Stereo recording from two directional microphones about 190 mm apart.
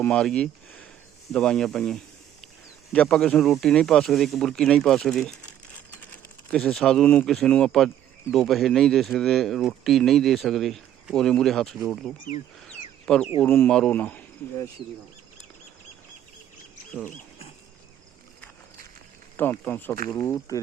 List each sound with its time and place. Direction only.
0.0 s speech: 5° left (ahead or behind)
12.5 s a sound: 5° left (ahead or behind)
13.4 s speech: 10° left (ahead or behind)
19.4 s speech: 10° left (ahead or behind)